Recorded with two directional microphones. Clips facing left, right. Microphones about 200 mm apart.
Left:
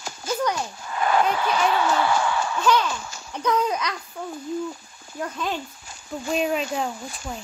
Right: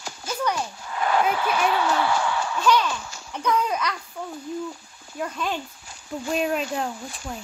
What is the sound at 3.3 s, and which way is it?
Speech, 10° left (ahead or behind).